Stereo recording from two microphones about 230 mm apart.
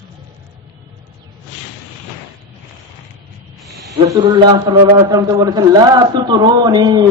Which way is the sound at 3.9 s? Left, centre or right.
Centre.